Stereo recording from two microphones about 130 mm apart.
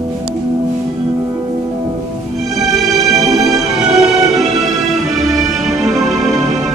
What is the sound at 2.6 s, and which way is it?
Music, centre (ahead or behind).